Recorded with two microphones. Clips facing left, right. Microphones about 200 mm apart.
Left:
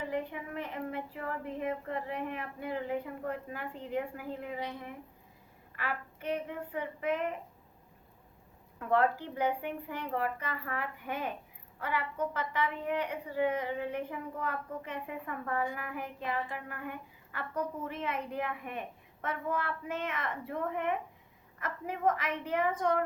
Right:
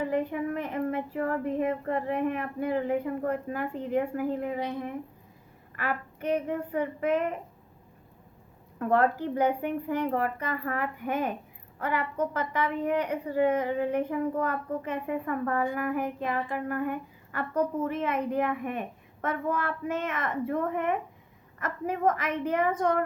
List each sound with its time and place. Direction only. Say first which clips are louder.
0.0 s speech: right 8 dB; 45° right (ahead or behind)
8.8 s speech: right 4 dB; 45° right (ahead or behind)
17.5 s a woman's voice: right 8 dB; 90° right
17.8 s speech: right 8 dB; 50° right (ahead or behind)